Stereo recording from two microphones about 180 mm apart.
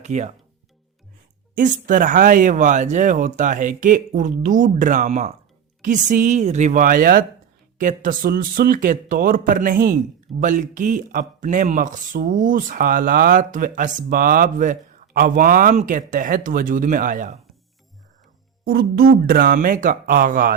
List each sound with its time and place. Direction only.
0.0 s speech: 40° right (ahead or behind)
1.5 s speech: 50° right (ahead or behind)
18.7 s speech: 60° right (ahead or behind)